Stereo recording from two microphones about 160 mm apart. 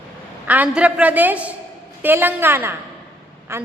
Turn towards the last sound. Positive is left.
turn(degrees=-15)  # may be behind; listen again after turning